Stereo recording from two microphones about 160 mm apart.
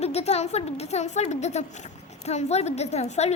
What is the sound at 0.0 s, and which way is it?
A woman's voice, 40° left (ahead or behind).